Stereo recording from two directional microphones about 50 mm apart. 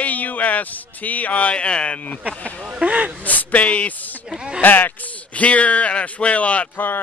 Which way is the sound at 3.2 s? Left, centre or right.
Left.